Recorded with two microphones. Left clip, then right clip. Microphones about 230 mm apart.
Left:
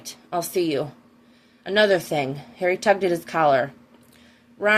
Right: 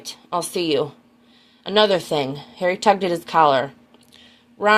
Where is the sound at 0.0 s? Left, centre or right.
Right.